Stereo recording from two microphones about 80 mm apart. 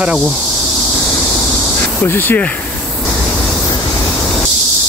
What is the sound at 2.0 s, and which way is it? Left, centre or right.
Speech, left.